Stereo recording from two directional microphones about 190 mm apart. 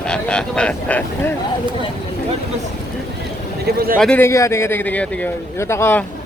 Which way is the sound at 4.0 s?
10° left (ahead or behind).